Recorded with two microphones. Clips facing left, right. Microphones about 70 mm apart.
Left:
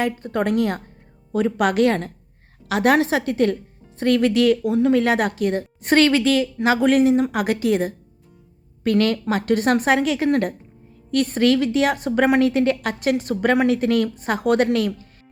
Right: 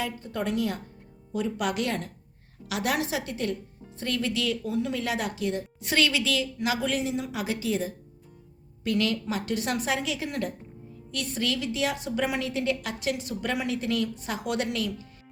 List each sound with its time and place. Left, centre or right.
0.0 s a woman's voice: left